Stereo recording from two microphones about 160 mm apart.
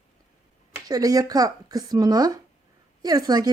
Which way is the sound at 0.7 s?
20° right (ahead or behind).